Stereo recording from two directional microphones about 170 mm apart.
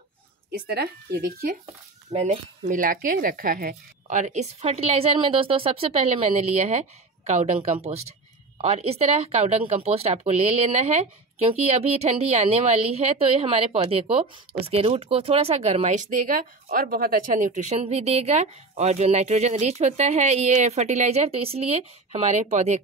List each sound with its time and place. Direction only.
0.5 s speech: 70° right (ahead or behind)
2.1 s speech: 50° right (ahead or behind)